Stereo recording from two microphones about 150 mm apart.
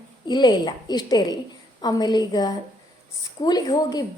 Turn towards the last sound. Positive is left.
turn(degrees=25)  # may be behind; listen again after turning